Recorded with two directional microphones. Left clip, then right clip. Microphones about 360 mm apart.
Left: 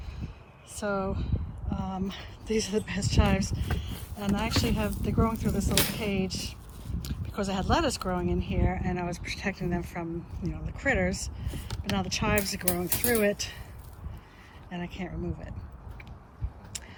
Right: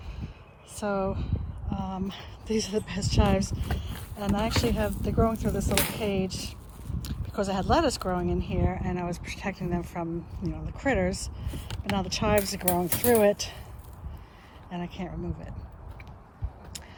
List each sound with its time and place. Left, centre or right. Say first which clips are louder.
0.8 s speech: right 2 dB; centre
14.7 s speech: right 1 dB; centre